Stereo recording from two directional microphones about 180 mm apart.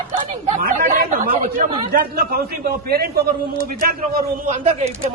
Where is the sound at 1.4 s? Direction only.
50° right (ahead or behind).